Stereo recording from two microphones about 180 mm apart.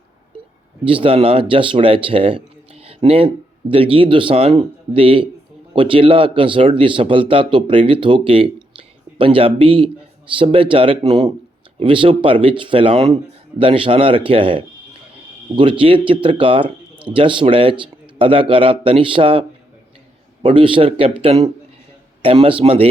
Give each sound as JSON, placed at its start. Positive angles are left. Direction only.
{"t": 0.9, "sound": "speech", "side_deg": -30}